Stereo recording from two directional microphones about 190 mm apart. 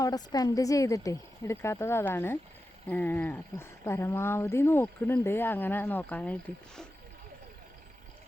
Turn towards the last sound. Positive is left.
turn(degrees=5)  # may be behind; listen again after turning